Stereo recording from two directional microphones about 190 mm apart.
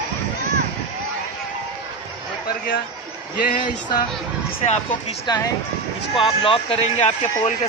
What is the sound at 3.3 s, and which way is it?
Speech, 45° left (ahead or behind).